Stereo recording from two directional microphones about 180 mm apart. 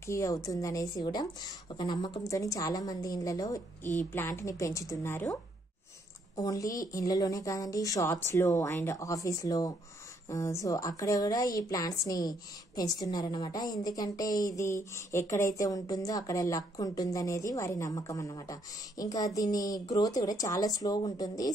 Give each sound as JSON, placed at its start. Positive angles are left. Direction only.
{"t": 0.0, "sound": "a woman's voice", "side_deg": 15}